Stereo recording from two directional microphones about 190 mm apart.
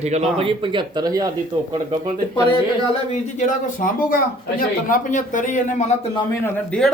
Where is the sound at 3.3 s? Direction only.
45° left (ahead or behind).